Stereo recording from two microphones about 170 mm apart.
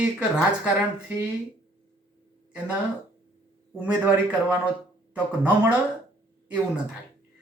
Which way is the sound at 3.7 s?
10° right (ahead or behind).